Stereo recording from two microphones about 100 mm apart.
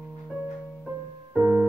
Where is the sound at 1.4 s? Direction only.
25° right (ahead or behind).